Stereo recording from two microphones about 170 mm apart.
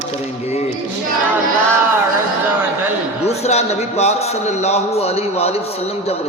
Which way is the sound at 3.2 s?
40° left (ahead or behind).